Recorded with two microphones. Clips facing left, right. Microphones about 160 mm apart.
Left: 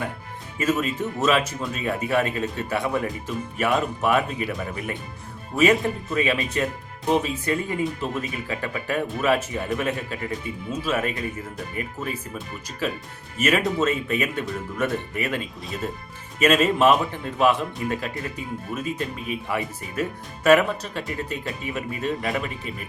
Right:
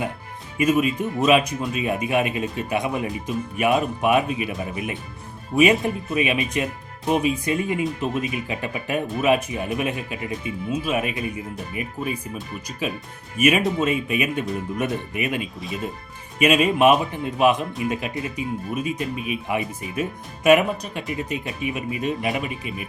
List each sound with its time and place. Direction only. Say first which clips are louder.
0.6 s speech: right 4 dB; 15° right (ahead or behind)
6.1 s speech: even; 15° right (ahead or behind)
16.4 s speech: right 1 dB; 15° right (ahead or behind)